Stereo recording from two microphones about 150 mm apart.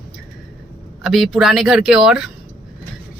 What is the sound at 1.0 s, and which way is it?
Speech, centre (ahead or behind).